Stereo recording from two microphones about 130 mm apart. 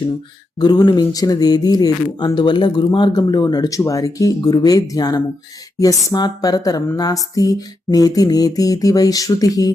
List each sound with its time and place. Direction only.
0.6 s speech: 35° left (ahead or behind)